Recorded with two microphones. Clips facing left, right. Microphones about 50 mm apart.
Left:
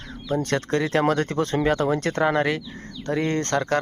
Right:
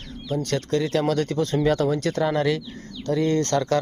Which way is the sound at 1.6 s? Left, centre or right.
Left.